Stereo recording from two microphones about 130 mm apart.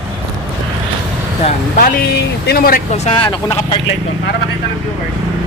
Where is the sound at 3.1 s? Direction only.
40° left (ahead or behind).